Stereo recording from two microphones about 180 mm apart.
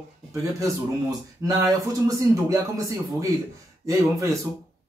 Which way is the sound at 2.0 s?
20° right (ahead or behind).